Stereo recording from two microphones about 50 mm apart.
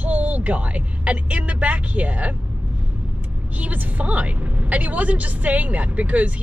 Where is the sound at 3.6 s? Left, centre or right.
Right.